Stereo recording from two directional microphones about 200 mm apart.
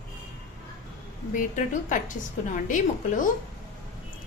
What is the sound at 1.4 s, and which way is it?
A woman's voice, 40° left (ahead or behind).